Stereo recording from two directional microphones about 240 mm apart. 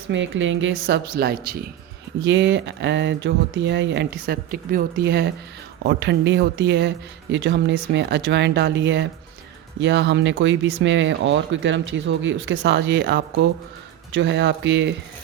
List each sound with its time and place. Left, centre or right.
0.1 s speech: right